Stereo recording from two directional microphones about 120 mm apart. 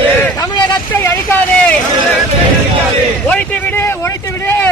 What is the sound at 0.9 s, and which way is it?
Vehicle, 15° left (ahead or behind).